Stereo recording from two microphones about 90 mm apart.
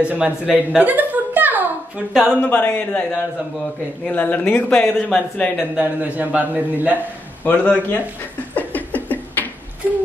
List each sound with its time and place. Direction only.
0.0 s a woman's voice: 15° right (ahead or behind)
2.4 s speech: 20° left (ahead or behind)
5.8 s a man's voice: 15° right (ahead or behind)
7.0 s a man's voice: 20° left (ahead or behind)
8.5 s a sound: 20° left (ahead or behind)